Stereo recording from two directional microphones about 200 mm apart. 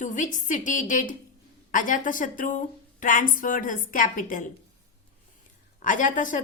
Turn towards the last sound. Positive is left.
turn(degrees=40)  # may be behind; listen again after turning